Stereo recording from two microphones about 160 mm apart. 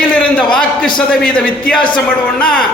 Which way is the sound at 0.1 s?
5° left (ahead or behind).